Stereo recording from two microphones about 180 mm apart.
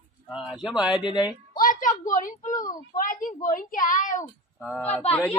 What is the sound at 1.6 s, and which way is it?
A woman's voice, 45° left (ahead or behind).